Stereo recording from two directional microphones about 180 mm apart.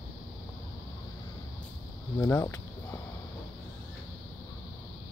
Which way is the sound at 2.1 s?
20° left (ahead or behind).